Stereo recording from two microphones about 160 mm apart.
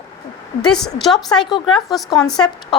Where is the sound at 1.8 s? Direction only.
Centre (ahead or behind).